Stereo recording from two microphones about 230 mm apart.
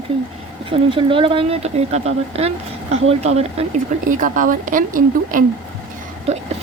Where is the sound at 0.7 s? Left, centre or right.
Right.